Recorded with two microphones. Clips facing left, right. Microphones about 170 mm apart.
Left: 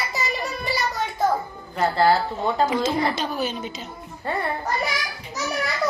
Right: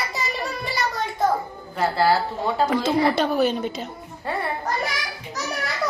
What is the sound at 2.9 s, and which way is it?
A woman's voice, 60° right (ahead or behind).